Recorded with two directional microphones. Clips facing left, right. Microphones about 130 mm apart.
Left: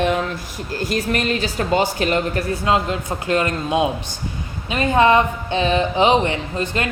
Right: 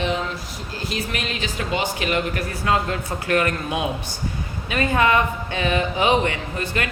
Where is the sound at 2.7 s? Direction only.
25° left (ahead or behind).